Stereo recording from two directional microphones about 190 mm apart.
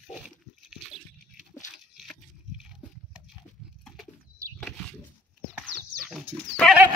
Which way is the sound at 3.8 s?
Centre (ahead or behind).